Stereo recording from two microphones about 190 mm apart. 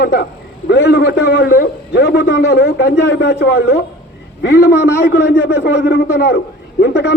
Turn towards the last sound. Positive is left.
turn(degrees=60)  # may be behind; listen again after turning